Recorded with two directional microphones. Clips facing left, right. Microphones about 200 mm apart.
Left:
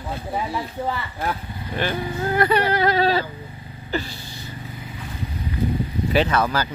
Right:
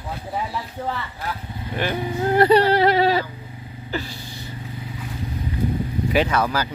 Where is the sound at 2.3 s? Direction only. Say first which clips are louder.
Right 5 dB; 30° right (ahead or behind).